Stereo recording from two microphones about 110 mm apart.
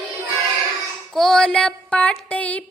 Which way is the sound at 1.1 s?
5° left (ahead or behind).